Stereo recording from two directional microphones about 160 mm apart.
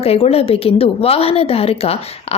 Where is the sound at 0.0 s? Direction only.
40° left (ahead or behind).